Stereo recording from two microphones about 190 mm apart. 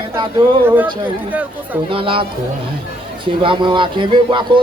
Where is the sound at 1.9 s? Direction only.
25° right (ahead or behind).